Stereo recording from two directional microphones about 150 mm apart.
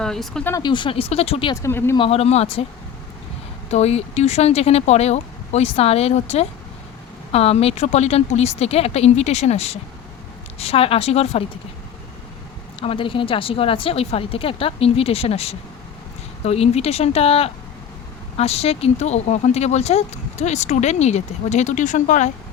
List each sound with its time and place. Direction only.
0.0 s speech: 5° left (ahead or behind)
0.6 s a woman's voice: 30° left (ahead or behind)
1.6 s speech: 15° left (ahead or behind)
2.0 s a woman's voice: 40° left (ahead or behind)
3.7 s speech: 45° left (ahead or behind)
12.8 s a woman's voice: 35° left (ahead or behind); by 22.3 s 55° left (ahead or behind)